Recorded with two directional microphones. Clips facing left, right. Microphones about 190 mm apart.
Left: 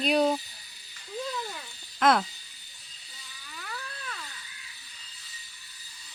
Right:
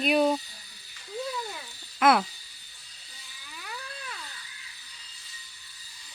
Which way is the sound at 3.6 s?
10° right (ahead or behind).